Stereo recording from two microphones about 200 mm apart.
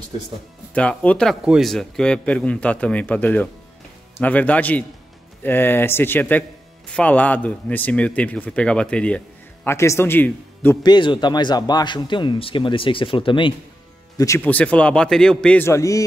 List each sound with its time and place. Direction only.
0.7 s a man's voice: 5° left (ahead or behind)
10.8 s a man's voice: 20° left (ahead or behind)